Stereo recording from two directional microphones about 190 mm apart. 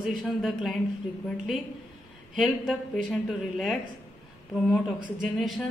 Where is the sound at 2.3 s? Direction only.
Centre (ahead or behind).